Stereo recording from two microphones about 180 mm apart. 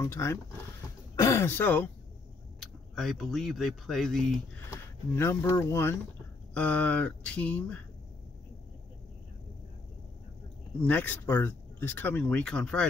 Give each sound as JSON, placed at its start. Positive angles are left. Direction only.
{"t": 0.0, "sound": "speech", "side_deg": 15}
{"t": 4.6, "sound": "speech", "side_deg": 15}
{"t": 10.9, "sound": "speech", "side_deg": 10}